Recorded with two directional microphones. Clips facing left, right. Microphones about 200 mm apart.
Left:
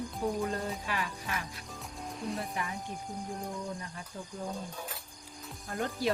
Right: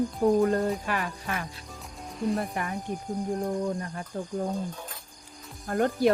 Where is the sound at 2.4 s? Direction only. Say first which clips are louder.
Right 6 dB; 60° right (ahead or behind).